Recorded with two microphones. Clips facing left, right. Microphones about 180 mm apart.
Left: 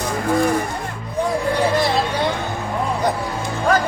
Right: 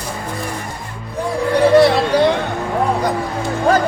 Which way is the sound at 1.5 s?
65° right (ahead or behind).